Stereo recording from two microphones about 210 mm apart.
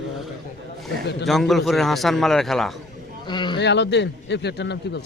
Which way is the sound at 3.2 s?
20° left (ahead or behind).